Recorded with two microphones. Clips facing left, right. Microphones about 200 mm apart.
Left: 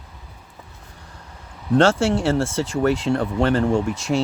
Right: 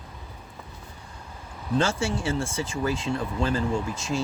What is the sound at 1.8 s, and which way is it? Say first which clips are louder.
Speech: left 9 dB; 70° left (ahead or behind).